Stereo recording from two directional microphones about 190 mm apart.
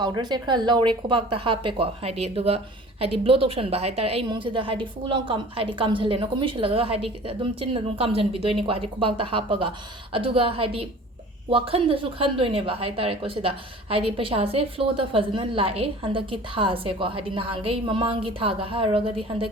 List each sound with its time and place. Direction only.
0.0 s a woman's voice: 20° right (ahead or behind)